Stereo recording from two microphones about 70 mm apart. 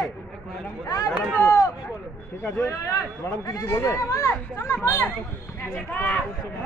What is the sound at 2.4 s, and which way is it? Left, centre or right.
Speech, left.